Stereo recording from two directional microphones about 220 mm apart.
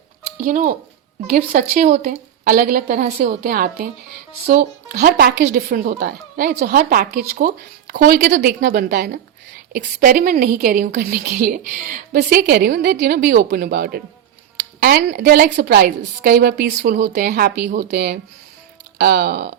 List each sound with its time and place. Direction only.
0.3 s a woman's voice: 40° right (ahead or behind)